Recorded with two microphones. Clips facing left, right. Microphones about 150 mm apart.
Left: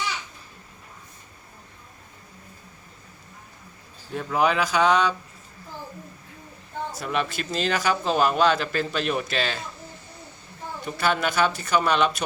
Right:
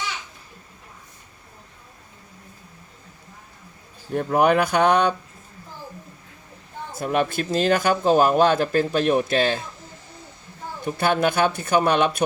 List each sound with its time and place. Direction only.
4.1 s speech: 50° right (ahead or behind)
6.9 s speech: 45° right (ahead or behind)
10.8 s speech: 50° right (ahead or behind)